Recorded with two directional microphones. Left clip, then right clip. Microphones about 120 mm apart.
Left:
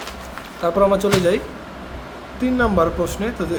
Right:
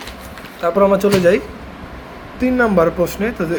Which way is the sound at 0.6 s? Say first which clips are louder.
Right 3 dB; 25° right (ahead or behind).